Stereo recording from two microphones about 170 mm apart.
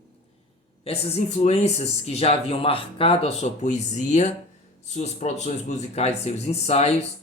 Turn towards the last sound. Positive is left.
turn(degrees=40)  # may be behind; listen again after turning